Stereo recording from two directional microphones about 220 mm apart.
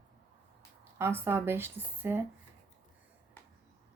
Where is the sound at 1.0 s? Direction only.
10° right (ahead or behind).